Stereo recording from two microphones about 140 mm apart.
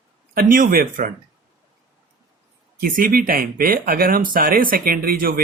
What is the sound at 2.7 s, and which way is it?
Speech, 90° right.